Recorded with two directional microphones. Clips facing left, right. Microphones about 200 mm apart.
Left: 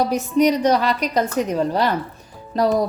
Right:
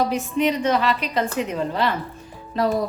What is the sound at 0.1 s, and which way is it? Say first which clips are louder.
A woman's voice: left 4 dB; 40° left (ahead or behind).